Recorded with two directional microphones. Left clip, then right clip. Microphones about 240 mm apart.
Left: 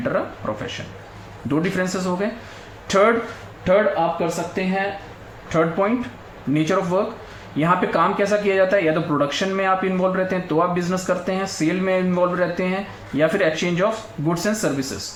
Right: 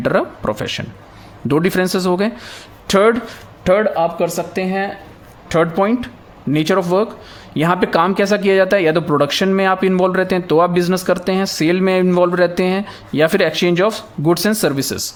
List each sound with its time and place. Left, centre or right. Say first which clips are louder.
0.0 s speech: right 6 dB; right